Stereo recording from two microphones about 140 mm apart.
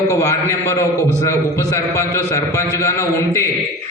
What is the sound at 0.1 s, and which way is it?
A man's voice, 20° left (ahead or behind).